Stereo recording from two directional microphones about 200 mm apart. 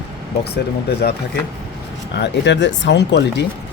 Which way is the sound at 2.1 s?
60° left (ahead or behind).